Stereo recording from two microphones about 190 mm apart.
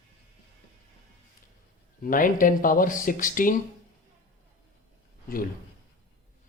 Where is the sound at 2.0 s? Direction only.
45° left (ahead or behind).